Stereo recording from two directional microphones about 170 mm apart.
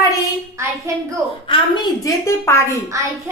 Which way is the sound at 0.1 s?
20° right (ahead or behind).